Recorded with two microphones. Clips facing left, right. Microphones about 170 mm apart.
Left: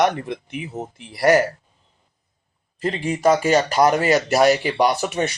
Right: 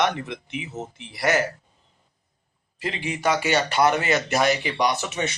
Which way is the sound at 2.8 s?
40° left (ahead or behind).